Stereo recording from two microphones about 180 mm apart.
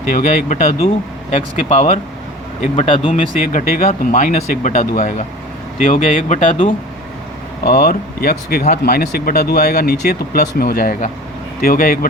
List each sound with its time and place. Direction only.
0.1 s speech: 45° left (ahead or behind)
3.1 s speech: 45° left (ahead or behind)
7.6 s speech: 55° left (ahead or behind)